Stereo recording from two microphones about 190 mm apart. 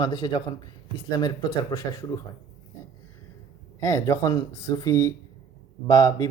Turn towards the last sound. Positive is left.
turn(degrees=20)  # may be behind; listen again after turning